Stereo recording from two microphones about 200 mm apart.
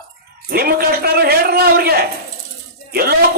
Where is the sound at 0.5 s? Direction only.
50° right (ahead or behind).